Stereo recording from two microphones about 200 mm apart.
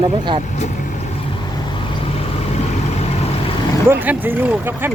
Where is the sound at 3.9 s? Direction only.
10° right (ahead or behind).